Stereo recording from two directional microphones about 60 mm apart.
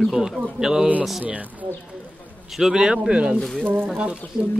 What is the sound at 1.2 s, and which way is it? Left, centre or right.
Speech, right.